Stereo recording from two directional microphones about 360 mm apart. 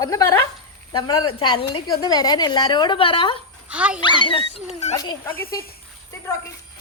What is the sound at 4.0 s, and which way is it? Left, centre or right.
A woman's voice, centre.